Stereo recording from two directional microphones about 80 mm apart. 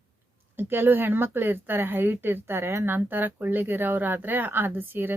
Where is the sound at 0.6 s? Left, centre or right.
Right.